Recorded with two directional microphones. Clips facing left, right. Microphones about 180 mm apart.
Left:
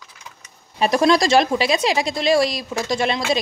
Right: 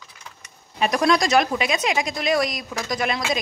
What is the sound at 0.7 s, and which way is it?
Speech, 30° left (ahead or behind).